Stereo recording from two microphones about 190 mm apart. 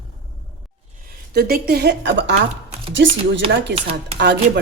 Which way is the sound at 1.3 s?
55° right (ahead or behind).